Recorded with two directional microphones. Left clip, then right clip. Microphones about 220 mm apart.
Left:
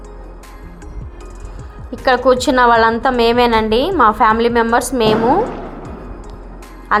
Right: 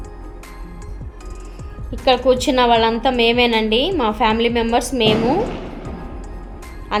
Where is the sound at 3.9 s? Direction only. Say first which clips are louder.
Left 8 dB; 25° left (ahead or behind).